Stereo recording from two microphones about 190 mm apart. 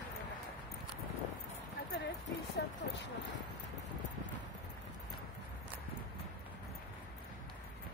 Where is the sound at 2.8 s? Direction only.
45° left (ahead or behind).